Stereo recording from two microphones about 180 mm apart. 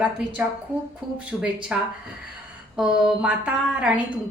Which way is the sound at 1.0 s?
Centre (ahead or behind).